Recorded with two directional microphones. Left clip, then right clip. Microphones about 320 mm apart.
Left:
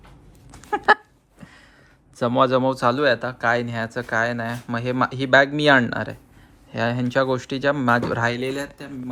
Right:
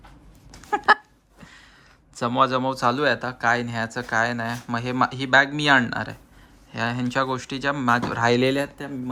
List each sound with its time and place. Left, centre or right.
0.9 s a sound: centre
2.1 s speech: centre
8.4 s speech: right